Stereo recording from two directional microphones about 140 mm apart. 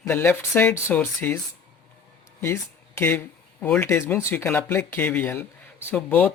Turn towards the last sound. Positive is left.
turn(degrees=10)  # may be behind; listen again after turning